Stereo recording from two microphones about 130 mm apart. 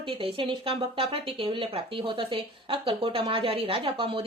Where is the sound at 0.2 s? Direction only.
45° right (ahead or behind).